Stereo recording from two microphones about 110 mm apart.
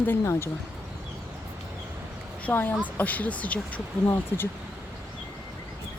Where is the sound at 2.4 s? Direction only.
15° left (ahead or behind).